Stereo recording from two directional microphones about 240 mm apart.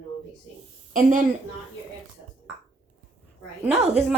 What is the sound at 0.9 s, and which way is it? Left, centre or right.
Speech, right.